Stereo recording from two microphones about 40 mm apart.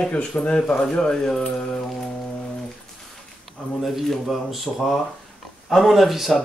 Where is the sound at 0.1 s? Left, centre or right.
Left; by 1.4 s centre.